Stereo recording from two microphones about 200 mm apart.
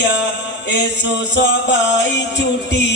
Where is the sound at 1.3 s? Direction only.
60° left (ahead or behind).